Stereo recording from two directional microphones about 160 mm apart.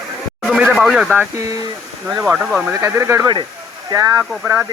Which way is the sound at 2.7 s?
15° right (ahead or behind).